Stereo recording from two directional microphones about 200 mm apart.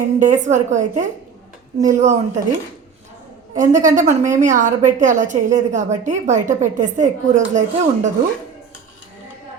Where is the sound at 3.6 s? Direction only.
40° right (ahead or behind).